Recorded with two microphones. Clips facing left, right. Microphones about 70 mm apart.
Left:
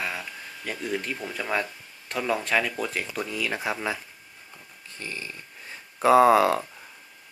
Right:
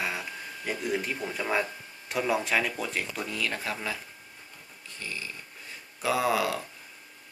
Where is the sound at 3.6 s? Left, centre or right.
Left.